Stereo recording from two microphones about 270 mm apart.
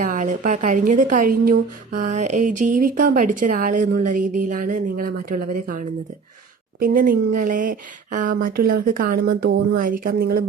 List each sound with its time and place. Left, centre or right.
0.2 s speech: right